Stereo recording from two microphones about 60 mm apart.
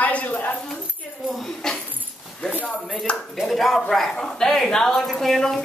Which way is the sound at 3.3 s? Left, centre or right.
Centre.